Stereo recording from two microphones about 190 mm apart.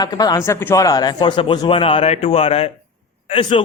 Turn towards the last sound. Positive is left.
turn(degrees=25)  # may be behind; listen again after turning